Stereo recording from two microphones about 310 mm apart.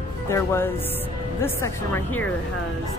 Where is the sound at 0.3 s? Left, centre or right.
Centre.